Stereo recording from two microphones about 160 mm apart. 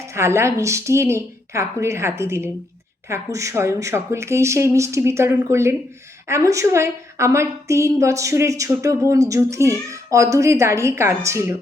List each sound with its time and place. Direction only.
0.1 s a woman's voice: 15° right (ahead or behind)